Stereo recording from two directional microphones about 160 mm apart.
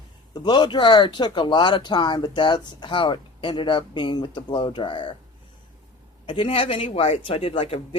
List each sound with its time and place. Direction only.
0.3 s speech: 30° left (ahead or behind)
6.2 s speech: 35° left (ahead or behind)